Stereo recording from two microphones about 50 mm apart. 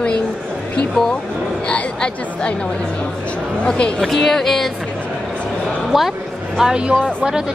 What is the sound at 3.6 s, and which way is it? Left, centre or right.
Speech, left.